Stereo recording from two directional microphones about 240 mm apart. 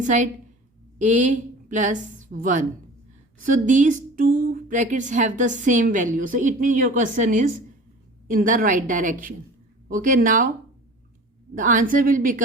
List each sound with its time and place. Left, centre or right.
0.0 s a woman's voice: right
11.5 s speech: right